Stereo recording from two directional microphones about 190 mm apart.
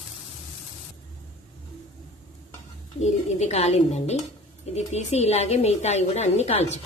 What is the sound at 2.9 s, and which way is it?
A woman's voice, 35° left (ahead or behind).